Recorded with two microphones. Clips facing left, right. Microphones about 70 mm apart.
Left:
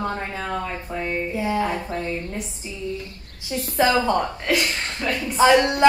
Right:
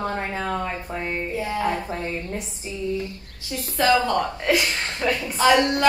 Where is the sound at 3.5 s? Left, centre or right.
Centre.